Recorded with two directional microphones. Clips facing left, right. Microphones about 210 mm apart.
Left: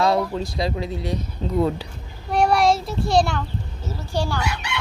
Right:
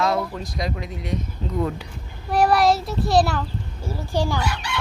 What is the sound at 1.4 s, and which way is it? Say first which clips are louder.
Speech: left 3 dB; 30° left (ahead or behind).